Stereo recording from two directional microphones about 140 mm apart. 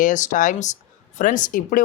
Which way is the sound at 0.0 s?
65° left (ahead or behind).